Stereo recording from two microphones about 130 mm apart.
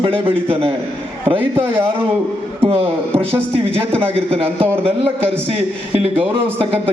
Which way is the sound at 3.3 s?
50° right (ahead or behind).